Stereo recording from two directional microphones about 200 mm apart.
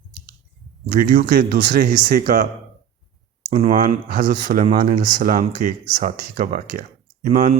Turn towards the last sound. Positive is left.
turn(degrees=-40)  # may be behind; listen again after turning